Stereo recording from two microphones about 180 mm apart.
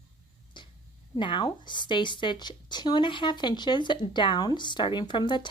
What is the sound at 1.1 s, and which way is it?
Speech, 25° left (ahead or behind).